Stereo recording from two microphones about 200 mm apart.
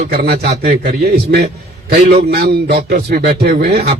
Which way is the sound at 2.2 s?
50° right (ahead or behind).